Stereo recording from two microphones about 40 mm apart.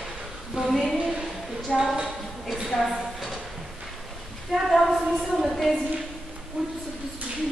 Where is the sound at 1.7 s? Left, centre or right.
Centre.